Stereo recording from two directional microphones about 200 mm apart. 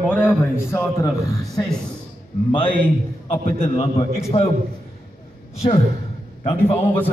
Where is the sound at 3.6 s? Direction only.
30° left (ahead or behind).